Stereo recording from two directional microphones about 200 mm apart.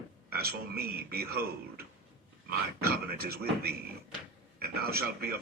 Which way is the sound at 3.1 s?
50° right (ahead or behind).